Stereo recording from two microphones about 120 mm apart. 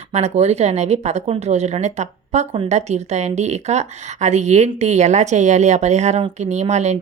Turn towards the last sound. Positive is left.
turn(degrees=-70)  # may be behind; listen again after turning